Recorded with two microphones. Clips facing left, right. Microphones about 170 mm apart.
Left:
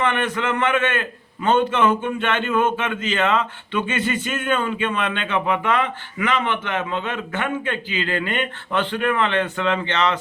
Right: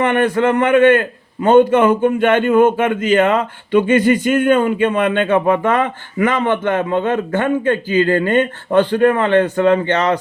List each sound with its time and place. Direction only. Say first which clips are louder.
0.0 s speech: right 8 dB; 45° right (ahead or behind)
0.7 s speech: right 11 dB; 50° right (ahead or behind)